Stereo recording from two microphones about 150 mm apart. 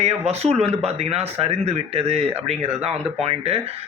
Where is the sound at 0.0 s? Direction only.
45° right (ahead or behind).